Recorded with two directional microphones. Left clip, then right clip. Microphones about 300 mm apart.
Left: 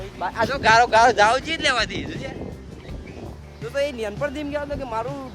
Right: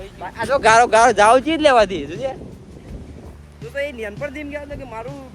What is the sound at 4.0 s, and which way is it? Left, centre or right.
Speech, centre.